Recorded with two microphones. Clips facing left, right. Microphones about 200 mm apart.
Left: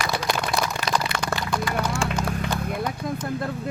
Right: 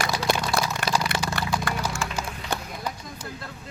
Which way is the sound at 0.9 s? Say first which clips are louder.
Left 1 dB; 10° right (ahead or behind).